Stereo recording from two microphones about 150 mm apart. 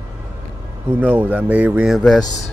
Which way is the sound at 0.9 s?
10° right (ahead or behind).